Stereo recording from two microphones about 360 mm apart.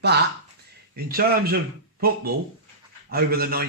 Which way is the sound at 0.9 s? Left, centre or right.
Right.